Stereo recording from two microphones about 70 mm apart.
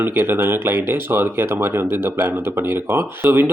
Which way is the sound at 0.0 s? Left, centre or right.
Right.